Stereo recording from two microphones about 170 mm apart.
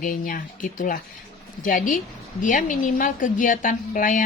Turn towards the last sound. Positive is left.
turn(degrees=50)  # may be behind; listen again after turning